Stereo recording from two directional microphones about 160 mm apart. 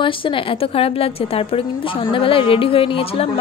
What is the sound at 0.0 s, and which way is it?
A woman's voice, 35° left (ahead or behind).